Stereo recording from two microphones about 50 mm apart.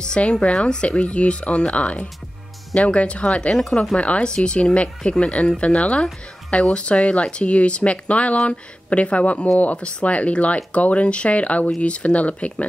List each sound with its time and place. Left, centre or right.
0.0 s speech: centre